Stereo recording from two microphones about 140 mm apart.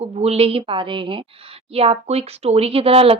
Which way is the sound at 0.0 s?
45° right (ahead or behind).